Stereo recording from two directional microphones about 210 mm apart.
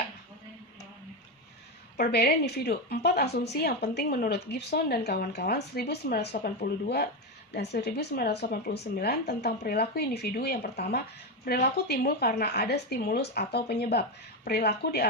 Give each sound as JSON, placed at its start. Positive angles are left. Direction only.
{"t": 2.0, "sound": "a woman's voice", "side_deg": 50}